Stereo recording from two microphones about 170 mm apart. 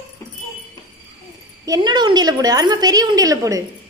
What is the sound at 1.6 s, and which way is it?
A woman's voice, 25° right (ahead or behind).